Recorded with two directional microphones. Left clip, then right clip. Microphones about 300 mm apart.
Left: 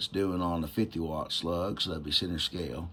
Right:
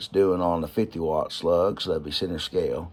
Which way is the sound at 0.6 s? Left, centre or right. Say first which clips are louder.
Right 6 dB; centre.